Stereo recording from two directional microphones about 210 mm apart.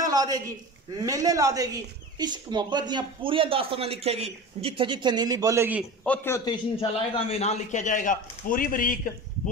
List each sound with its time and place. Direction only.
0.0 s a man's voice: 15° right (ahead or behind)
6.0 s a man's voice: 10° left (ahead or behind); by 9.1 s 40° left (ahead or behind)